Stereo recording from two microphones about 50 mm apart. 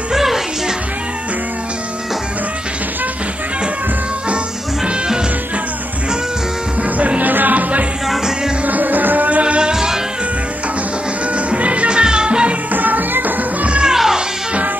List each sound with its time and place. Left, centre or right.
0.1 s music: centre
4.8 s music: centre
6.8 s music: right
9.4 s music: centre
11.3 s music: right
12.7 s music: right
13.9 s music: centre